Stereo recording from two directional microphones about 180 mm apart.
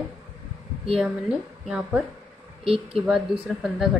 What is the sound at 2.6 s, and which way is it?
Speech, 30° right (ahead or behind).